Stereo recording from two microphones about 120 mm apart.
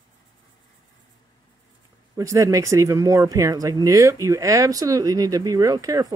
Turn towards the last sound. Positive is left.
turn(degrees=-30)  # may be behind; listen again after turning